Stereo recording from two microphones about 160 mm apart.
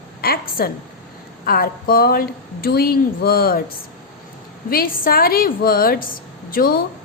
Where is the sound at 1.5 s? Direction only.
70° left (ahead or behind).